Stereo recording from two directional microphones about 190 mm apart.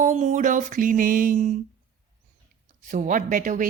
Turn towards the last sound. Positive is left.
turn(degrees=-45)  # may be behind; listen again after turning